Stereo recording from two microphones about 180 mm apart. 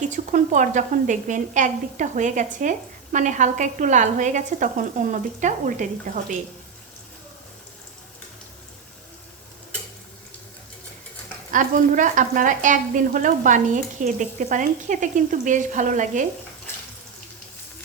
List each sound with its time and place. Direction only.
0.1 s a woman's voice: 45° right (ahead or behind)
11.5 s a woman's voice: 45° right (ahead or behind)